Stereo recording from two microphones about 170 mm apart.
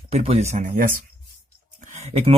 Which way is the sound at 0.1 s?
40° right (ahead or behind).